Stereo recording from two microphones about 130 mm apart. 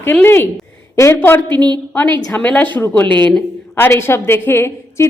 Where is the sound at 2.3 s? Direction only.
15° left (ahead or behind).